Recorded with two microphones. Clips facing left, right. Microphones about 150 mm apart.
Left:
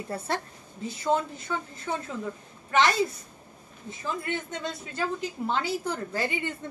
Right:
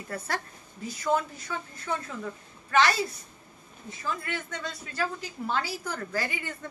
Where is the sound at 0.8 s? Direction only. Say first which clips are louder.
Left 1 dB; 25° left (ahead or behind).